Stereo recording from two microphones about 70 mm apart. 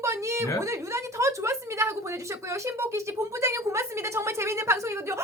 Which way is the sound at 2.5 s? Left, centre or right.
Right.